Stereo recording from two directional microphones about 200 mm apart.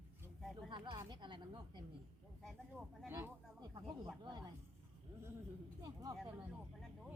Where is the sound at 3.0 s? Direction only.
10° right (ahead or behind).